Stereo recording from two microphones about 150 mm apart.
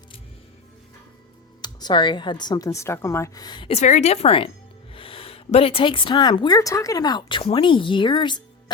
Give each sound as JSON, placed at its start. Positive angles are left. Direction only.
{"t": 1.6, "sound": "speech", "side_deg": 30}
{"t": 3.8, "sound": "a woman's voice", "side_deg": 50}